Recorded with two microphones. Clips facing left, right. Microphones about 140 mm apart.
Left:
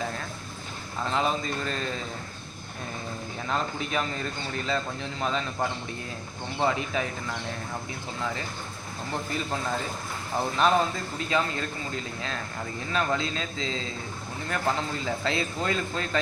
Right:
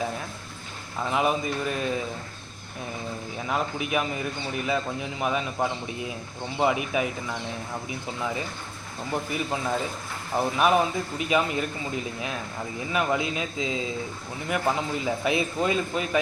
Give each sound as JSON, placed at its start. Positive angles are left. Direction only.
{"t": 1.0, "sound": "speech", "side_deg": -15}
{"t": 3.4, "sound": "speech", "side_deg": -10}